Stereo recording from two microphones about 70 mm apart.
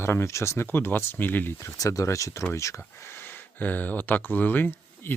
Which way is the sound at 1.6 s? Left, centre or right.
Left.